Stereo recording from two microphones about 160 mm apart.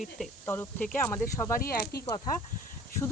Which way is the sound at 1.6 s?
70° left (ahead or behind).